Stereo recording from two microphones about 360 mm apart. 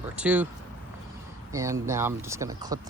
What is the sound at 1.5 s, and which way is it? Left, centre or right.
Speech, centre.